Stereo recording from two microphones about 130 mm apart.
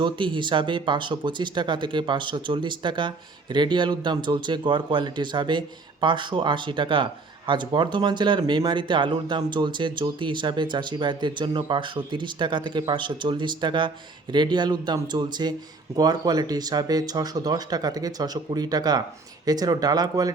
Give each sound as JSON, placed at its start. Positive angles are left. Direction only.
{"t": 0.0, "sound": "speech", "side_deg": -40}